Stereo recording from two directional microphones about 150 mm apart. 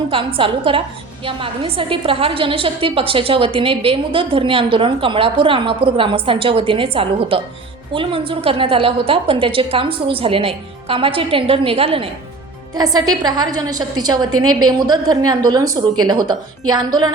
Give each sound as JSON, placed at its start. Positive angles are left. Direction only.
{"t": 0.1, "sound": "a woman's voice", "side_deg": -35}
{"t": 12.7, "sound": "a woman's voice", "side_deg": -25}